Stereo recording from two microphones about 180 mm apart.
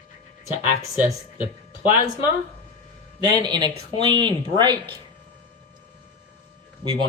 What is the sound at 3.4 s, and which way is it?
Speech, 25° right (ahead or behind).